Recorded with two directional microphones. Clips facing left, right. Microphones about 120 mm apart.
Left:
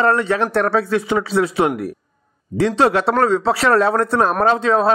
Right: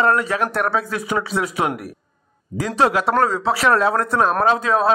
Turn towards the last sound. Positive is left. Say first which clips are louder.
# left 2 dB
turn(degrees=30)  # may be behind; listen again after turning